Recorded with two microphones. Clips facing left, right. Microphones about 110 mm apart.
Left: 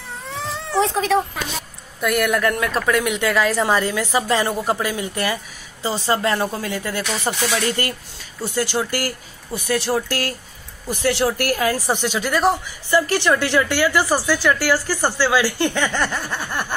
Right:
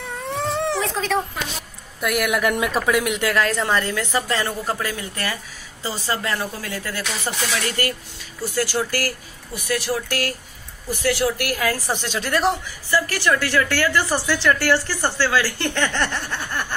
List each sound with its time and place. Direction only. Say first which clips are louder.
0.0 s baby cry: right 4 dB; 55° right (ahead or behind)
0.7 s a sound: left 6 dB; 20° left (ahead or behind)
2.0 s speech: left 2 dB; 5° right (ahead or behind)
3.0 s speech: left 2 dB; centre (ahead or behind); by 11.3 s 25° left (ahead or behind)
11.3 s speech: left 4 dB; 35° left (ahead or behind)
11.6 s speech: left 2 dB; 20° left (ahead or behind); by 12.5 s centre (ahead or behind)
12.9 s speech: left 3 dB; 20° left (ahead or behind)